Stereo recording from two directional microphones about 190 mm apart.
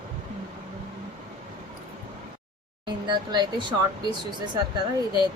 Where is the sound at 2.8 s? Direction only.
25° right (ahead or behind).